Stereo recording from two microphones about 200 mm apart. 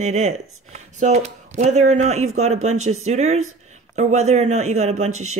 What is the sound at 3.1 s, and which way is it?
Speech, 35° right (ahead or behind).